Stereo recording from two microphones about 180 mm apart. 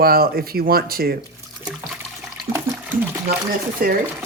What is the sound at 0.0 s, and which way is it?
A woman's voice, 55° right (ahead or behind).